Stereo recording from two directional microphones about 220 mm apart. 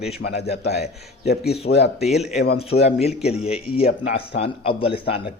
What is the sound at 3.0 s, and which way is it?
A man's voice, 30° left (ahead or behind).